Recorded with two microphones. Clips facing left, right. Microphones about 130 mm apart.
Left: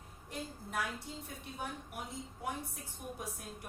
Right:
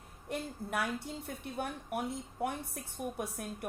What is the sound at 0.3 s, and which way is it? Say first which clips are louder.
A woman's voice: right 6 dB; 60° right (ahead or behind).